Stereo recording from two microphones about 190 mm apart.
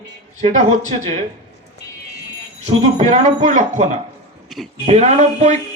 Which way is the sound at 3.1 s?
35° right (ahead or behind).